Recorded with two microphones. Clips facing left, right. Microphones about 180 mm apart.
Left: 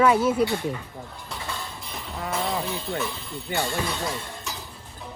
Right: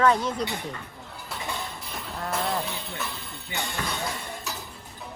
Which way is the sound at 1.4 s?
15° right (ahead or behind).